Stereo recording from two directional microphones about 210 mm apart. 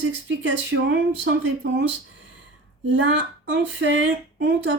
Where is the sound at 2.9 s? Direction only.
60° right (ahead or behind).